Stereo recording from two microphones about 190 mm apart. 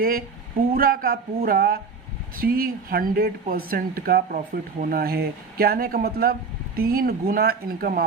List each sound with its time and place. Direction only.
0.8 s speech: 50° right (ahead or behind)